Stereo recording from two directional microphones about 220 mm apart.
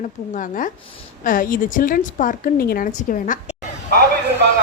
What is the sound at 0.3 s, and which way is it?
A woman's voice, 35° left (ahead or behind).